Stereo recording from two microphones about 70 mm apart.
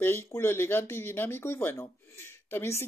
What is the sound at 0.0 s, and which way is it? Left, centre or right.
Speech, left.